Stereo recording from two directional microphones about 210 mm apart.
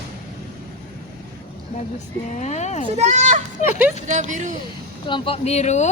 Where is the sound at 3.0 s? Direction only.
35° right (ahead or behind).